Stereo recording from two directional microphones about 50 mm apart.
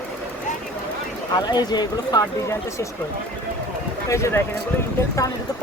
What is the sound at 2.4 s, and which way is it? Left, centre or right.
Speech, left.